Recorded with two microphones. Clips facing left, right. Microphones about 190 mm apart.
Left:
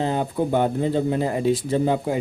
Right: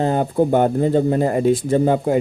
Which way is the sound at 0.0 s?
50° right (ahead or behind).